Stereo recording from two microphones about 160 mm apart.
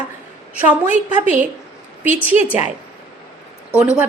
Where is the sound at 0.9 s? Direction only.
50° right (ahead or behind).